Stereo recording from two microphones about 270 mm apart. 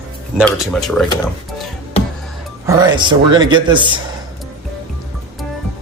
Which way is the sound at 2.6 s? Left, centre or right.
Centre.